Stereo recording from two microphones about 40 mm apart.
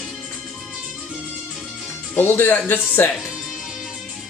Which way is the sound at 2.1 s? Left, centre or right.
Left.